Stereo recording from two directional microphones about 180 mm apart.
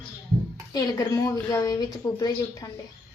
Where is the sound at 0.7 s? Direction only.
15° left (ahead or behind).